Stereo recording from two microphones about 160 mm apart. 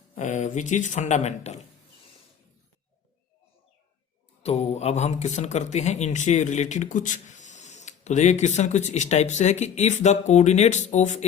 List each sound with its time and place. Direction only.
0.2 s speech: 50° left (ahead or behind)
4.4 s speech: 40° left (ahead or behind)